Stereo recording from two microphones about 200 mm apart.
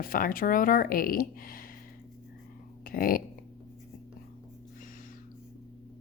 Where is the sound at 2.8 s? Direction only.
45° left (ahead or behind).